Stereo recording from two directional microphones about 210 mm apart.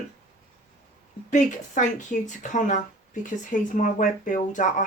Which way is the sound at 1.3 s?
35° left (ahead or behind).